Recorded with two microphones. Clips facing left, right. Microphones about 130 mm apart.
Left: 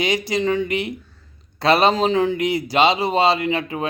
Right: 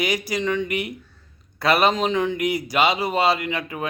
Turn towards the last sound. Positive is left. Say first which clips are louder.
# left 4 dB
turn(degrees=25)  # may be behind; listen again after turning